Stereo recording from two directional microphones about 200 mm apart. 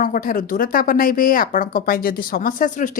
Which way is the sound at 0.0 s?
40° left (ahead or behind).